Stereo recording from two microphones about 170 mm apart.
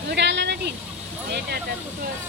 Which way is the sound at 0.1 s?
90° right.